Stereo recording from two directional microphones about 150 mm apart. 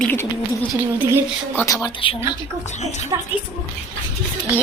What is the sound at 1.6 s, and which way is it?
Speech, 25° left (ahead or behind).